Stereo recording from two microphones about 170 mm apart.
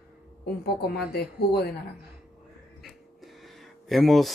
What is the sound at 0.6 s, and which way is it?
Speech, 70° left (ahead or behind).